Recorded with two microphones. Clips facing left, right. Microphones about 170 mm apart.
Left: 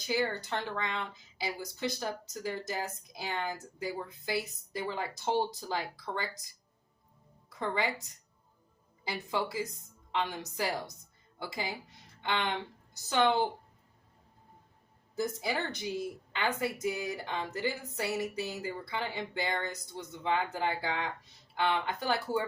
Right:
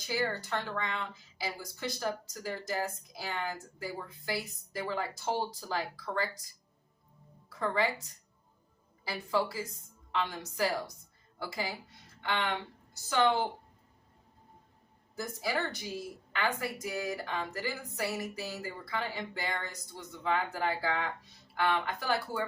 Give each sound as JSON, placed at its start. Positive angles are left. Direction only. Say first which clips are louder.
{"t": 0.1, "sound": "a woman's voice", "louder": "left 1 dB", "side_deg": 20}
{"t": 7.5, "sound": "a woman's voice", "louder": "right 2 dB", "side_deg": 20}
{"t": 9.0, "sound": "a woman's voice", "louder": "right 2 dB", "side_deg": 20}
{"t": 15.1, "sound": "a woman's voice", "louder": "left 2 dB", "side_deg": 20}